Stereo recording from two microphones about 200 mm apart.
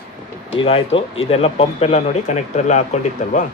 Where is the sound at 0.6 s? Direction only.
30° left (ahead or behind).